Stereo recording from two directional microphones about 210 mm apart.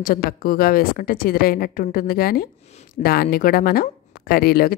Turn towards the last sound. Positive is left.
turn(degrees=45)  # may be behind; listen again after turning